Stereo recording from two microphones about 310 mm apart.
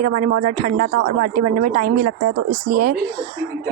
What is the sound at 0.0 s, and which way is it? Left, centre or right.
A woman's voice, right.